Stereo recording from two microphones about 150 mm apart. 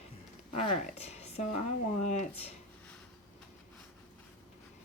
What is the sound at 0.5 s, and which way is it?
Speech, 45° left (ahead or behind).